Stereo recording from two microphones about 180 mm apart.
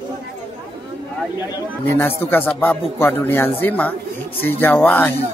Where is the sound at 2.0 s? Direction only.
10° left (ahead or behind).